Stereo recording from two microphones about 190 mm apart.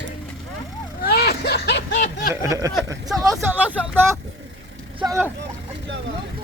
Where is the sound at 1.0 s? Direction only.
55° left (ahead or behind).